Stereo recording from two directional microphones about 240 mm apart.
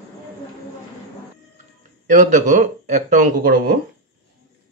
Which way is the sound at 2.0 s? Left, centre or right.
Right.